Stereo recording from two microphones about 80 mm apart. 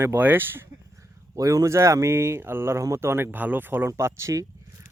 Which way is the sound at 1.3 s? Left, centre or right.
Right.